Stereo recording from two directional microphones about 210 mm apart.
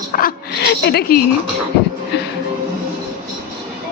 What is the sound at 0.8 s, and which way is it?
Speech, 50° left (ahead or behind).